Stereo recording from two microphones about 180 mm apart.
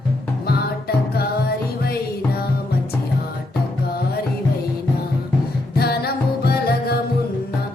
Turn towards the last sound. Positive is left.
turn(degrees=60)  # may be behind; listen again after turning